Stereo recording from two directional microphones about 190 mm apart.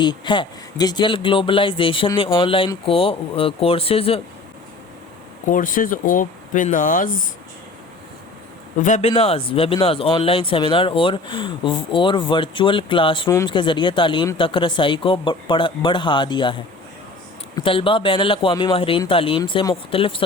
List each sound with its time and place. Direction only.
0.0 s speech: 25° left (ahead or behind)
5.5 s speech: 45° left (ahead or behind)
8.8 s speech: 35° left (ahead or behind)